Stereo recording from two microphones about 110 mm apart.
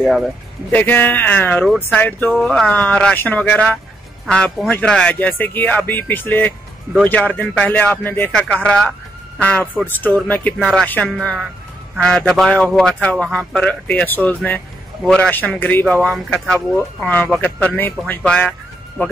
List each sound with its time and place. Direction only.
0.7 s speech: 15° left (ahead or behind)
8.3 s speech: 5° left (ahead or behind)